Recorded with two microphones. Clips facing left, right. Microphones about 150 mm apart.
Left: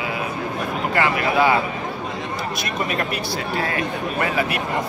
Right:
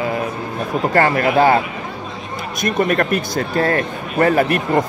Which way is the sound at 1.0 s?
45° right (ahead or behind).